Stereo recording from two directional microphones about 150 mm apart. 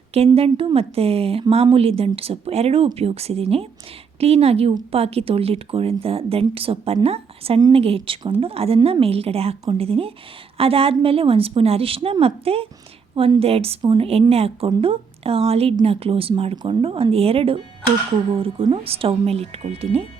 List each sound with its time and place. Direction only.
0.1 s a woman's voice: 40° right (ahead or behind)